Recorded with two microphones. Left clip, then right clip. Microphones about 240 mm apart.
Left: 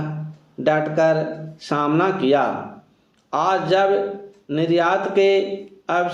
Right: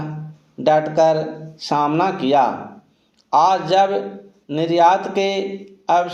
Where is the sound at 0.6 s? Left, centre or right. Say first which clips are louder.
Right 3 dB; centre.